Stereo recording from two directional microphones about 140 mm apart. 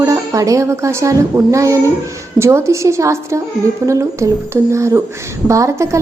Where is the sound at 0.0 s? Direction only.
25° right (ahead or behind).